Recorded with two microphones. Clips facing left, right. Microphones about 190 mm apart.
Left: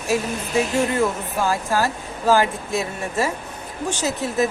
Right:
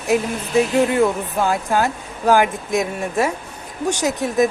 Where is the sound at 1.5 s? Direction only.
20° right (ahead or behind).